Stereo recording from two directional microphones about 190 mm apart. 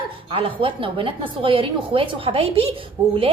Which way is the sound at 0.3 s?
30° right (ahead or behind).